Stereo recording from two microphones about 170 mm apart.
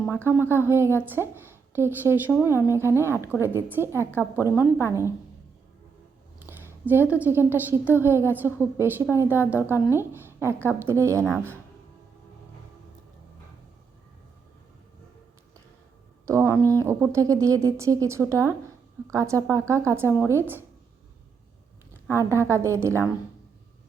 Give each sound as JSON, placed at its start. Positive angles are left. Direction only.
{"t": 0.1, "sound": "speech", "side_deg": -15}
{"t": 6.4, "sound": "a sound", "side_deg": -10}
{"t": 7.2, "sound": "speech", "side_deg": -10}
{"t": 16.2, "sound": "speech", "side_deg": -15}
{"t": 22.0, "sound": "speech", "side_deg": -15}